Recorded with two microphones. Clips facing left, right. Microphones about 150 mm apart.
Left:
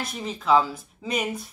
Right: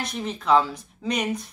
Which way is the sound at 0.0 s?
Centre (ahead or behind).